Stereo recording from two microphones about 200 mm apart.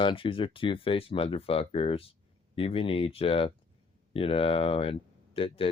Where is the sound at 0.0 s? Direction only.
25° left (ahead or behind).